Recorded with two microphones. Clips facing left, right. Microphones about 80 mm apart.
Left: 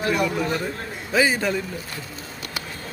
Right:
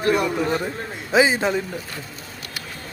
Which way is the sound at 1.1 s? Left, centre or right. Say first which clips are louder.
Right 3 dB; right.